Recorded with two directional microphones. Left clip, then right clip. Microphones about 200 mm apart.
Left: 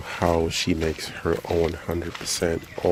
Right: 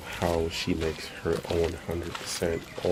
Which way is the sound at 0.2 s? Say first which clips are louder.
Left 6 dB; 35° left (ahead or behind).